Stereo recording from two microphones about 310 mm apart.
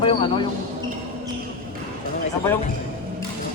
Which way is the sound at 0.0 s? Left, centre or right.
Centre.